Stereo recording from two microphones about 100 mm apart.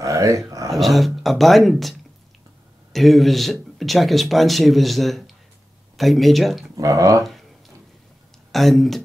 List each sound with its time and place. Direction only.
0.0 s a sound: 30° right (ahead or behind)
0.7 s speech: centre (ahead or behind)
6.8 s speech: 35° right (ahead or behind)
8.5 s speech: centre (ahead or behind)